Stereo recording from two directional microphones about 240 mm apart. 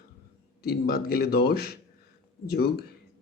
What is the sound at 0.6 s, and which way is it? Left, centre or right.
Speech, left.